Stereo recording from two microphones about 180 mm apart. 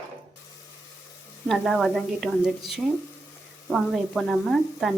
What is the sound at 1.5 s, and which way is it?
A woman's voice, centre (ahead or behind).